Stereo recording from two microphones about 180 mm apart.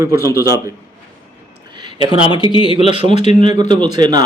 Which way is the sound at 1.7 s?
25° right (ahead or behind).